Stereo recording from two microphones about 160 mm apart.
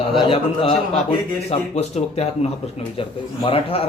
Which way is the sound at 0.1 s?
35° left (ahead or behind).